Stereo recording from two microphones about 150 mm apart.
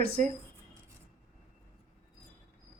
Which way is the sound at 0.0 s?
80° right.